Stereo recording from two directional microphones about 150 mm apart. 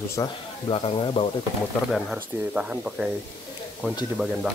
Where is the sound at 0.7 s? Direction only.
40° left (ahead or behind).